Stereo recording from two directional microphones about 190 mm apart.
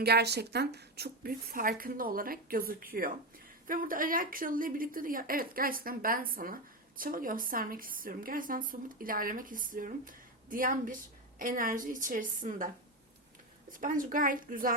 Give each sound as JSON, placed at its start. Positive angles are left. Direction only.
{"t": 0.0, "sound": "speech", "side_deg": -60}